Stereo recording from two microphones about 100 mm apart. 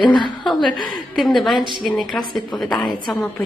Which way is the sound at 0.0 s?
50° left (ahead or behind).